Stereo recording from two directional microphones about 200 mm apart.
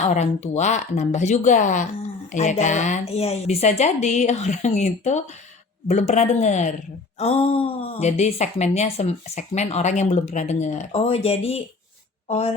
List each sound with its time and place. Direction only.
0.0 s a woman's voice: 35° left (ahead or behind)